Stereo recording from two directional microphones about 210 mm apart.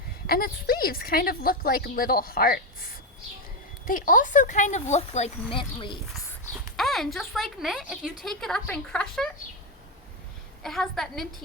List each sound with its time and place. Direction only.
0.3 s a woman's voice: 45° left (ahead or behind)
3.8 s speech: 40° left (ahead or behind); by 6.0 s 25° left (ahead or behind)
6.7 s speech: centre (ahead or behind)
10.6 s speech: centre (ahead or behind)